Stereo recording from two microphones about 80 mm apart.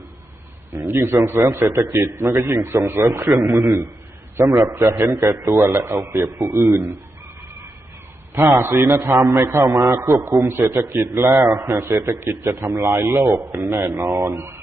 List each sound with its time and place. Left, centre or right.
0.8 s a man's voice: right
8.4 s a man's voice: right
13.2 s a man's voice: right
13.5 s a man's voice: right
14.3 s speech: right